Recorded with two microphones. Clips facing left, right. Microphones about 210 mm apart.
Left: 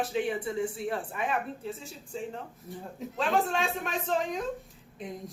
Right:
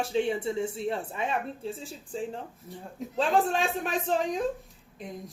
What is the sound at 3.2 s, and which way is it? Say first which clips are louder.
A woman's voice: right 3 dB; 35° right (ahead or behind).